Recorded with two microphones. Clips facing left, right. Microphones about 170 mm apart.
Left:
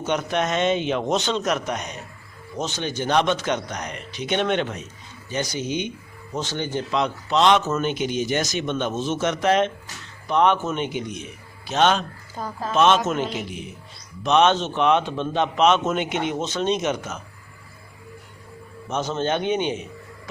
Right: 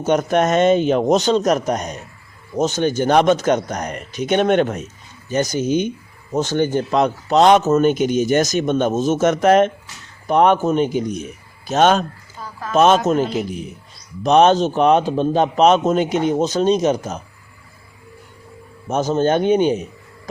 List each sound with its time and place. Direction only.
0.0 s a man's voice: 45° right (ahead or behind)
12.4 s speech: 40° left (ahead or behind)
12.7 s speech: 40° right (ahead or behind)
18.9 s a man's voice: 45° right (ahead or behind)